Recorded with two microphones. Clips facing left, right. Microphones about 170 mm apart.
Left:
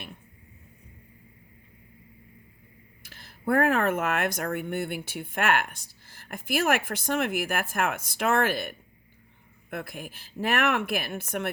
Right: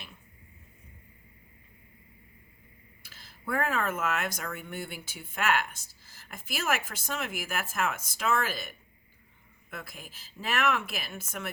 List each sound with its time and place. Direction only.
3.1 s speech: 55° left (ahead or behind)